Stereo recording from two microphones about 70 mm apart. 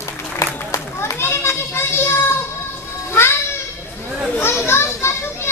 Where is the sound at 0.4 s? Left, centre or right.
Left.